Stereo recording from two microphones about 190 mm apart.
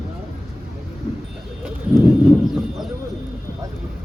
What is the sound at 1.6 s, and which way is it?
Bird, 10° right (ahead or behind).